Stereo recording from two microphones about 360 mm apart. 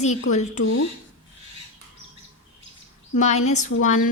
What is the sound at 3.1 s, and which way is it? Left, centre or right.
Speech, centre.